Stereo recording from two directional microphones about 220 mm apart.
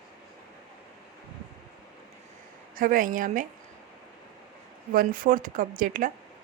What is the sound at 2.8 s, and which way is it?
Speech, 40° right (ahead or behind).